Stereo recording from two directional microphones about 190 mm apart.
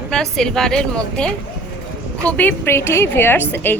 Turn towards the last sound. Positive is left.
turn(degrees=10)  # may be behind; listen again after turning